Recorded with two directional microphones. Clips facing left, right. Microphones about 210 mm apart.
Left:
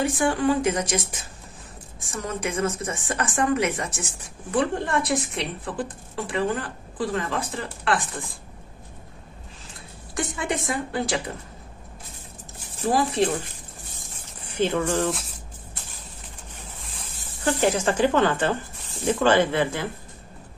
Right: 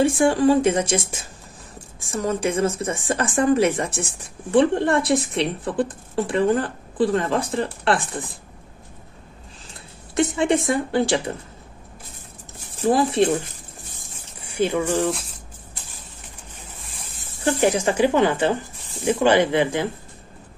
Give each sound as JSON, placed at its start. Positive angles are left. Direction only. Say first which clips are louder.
{"t": 0.0, "sound": "a woman's voice", "louder": "right 5 dB", "side_deg": -30}
{"t": 10.1, "sound": "a woman's voice", "louder": "right 8 dB", "side_deg": -25}
{"t": 12.8, "sound": "a woman's voice", "louder": "right 4 dB", "side_deg": -25}
{"t": 14.4, "sound": "speech", "louder": "right 2 dB", "side_deg": -10}
{"t": 15.0, "sound": "speech", "louder": "right 3 dB", "side_deg": 0}
{"t": 17.6, "sound": "speech", "louder": "right 3 dB", "side_deg": -15}